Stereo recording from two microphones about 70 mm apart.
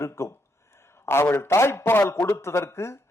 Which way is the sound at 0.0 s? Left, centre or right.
Left.